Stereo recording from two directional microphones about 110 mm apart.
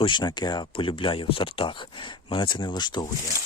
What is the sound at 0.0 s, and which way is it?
Speech, 45° left (ahead or behind).